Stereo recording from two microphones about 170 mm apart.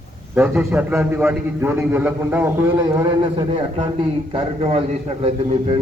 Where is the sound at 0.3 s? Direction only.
10° right (ahead or behind).